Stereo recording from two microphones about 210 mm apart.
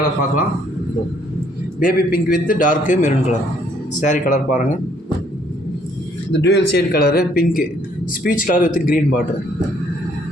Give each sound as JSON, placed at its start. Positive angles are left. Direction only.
{"t": 1.8, "sound": "a man's voice", "side_deg": 40}
{"t": 6.3, "sound": "a man's voice", "side_deg": 55}